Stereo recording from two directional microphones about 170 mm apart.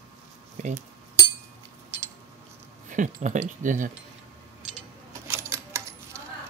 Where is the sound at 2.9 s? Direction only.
45° right (ahead or behind).